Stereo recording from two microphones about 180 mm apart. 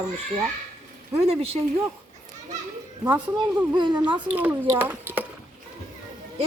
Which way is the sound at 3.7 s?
25° right (ahead or behind).